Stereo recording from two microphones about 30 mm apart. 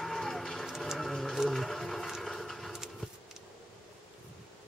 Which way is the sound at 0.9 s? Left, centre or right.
Centre.